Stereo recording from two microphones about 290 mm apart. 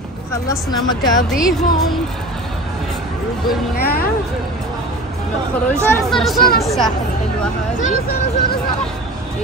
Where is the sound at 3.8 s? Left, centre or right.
Left.